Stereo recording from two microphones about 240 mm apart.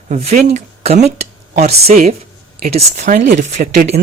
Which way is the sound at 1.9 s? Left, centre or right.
Right.